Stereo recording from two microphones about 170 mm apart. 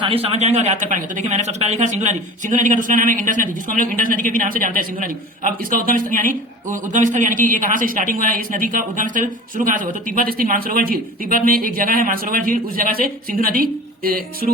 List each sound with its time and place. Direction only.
0.0 s a man's voice: 35° right (ahead or behind); by 14.5 s 60° right (ahead or behind)